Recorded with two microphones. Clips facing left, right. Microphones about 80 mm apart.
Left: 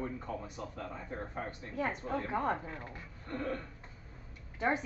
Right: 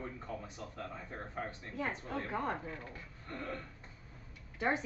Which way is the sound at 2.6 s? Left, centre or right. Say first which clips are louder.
Left 1 dB; left.